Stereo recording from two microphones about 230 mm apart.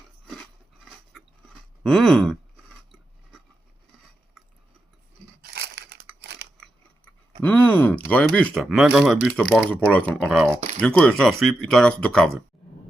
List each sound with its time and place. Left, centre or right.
1.8 s chewing: centre
5.5 s crushing: right
6.1 s scissors: right
6.6 s speech: centre